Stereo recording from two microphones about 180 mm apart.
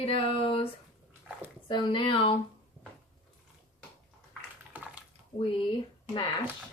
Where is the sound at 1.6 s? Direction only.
25° left (ahead or behind).